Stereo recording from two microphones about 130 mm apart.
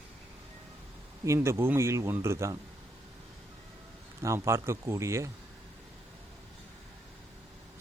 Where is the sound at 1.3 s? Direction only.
20° right (ahead or behind).